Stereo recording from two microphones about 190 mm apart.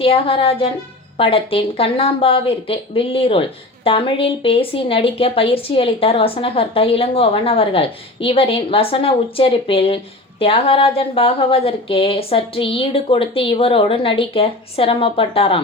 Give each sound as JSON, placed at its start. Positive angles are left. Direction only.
{"t": 0.0, "sound": "speech", "side_deg": 30}